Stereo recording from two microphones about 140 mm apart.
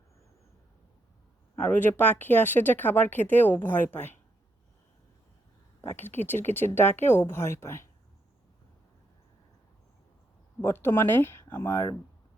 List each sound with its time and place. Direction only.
1.5 s speech: 15° left (ahead or behind)
5.8 s speech: 15° left (ahead or behind)
10.6 s speech: 15° left (ahead or behind)